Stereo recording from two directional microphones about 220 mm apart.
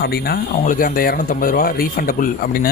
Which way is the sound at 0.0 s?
45° left (ahead or behind).